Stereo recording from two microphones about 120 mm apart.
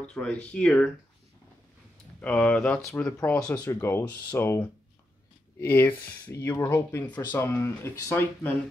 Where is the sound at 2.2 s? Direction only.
10° left (ahead or behind).